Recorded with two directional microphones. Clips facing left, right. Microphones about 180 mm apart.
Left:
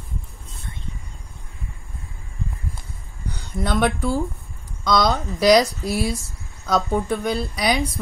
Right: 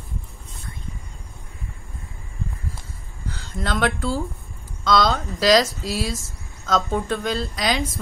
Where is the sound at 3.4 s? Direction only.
15° left (ahead or behind).